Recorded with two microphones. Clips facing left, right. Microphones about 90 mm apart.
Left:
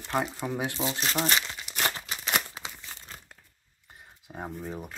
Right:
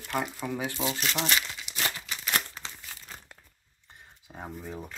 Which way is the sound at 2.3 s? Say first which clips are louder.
Left 2 dB; 15° left (ahead or behind).